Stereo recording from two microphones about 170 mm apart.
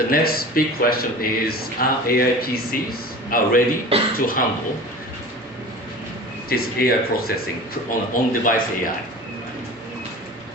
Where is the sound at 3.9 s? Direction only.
35° right (ahead or behind).